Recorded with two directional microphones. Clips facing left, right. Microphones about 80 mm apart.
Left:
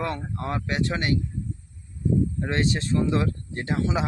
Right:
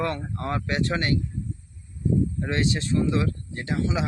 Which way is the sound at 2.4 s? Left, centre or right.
Left.